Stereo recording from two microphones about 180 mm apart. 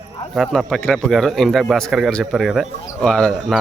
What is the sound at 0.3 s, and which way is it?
Speech, centre (ahead or behind).